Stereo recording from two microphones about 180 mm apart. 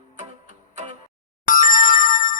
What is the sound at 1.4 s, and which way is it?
Telephone bell ringing, 50° left (ahead or behind).